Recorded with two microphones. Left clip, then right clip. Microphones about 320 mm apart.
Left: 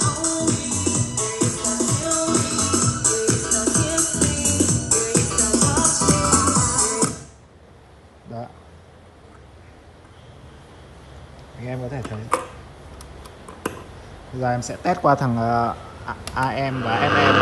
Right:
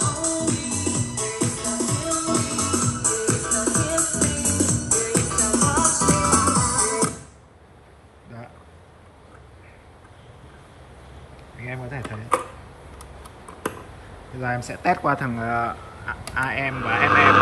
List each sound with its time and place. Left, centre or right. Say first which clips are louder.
0.0 s music: left 2 dB; centre
11.6 s a sound: left 2 dB; centre
13.0 s tick: left 1 dB; centre
14.4 s speech: left 2 dB; centre